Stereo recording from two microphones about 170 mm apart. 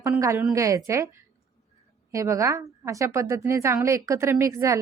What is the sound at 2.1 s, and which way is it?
A woman's voice, 20° right (ahead or behind).